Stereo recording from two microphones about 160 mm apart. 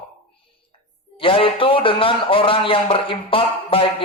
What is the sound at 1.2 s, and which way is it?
A man's voice, 35° left (ahead or behind).